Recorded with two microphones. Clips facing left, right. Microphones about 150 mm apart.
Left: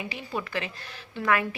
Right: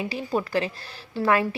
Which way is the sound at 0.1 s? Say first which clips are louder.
Right 7 dB; 40° right (ahead or behind).